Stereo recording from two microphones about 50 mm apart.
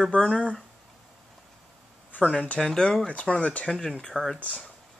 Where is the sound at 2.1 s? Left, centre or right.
Left.